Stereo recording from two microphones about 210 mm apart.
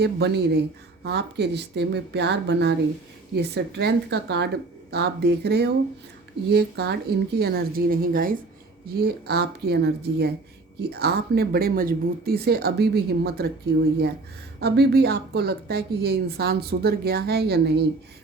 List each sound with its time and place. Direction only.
0.0 s speech: 50° right (ahead or behind)
14.6 s speech: 50° right (ahead or behind)